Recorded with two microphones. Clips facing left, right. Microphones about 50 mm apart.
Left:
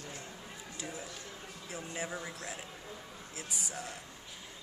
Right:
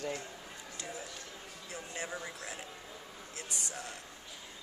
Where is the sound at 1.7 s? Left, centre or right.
Centre.